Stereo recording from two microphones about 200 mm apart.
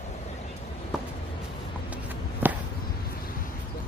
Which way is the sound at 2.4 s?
10° right (ahead or behind).